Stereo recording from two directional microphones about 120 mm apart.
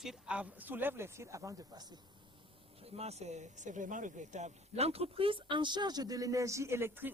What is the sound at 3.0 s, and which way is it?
Speech, 65° right (ahead or behind).